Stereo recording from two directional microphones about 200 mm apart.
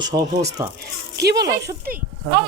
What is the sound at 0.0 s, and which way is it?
Snake, 20° right (ahead or behind).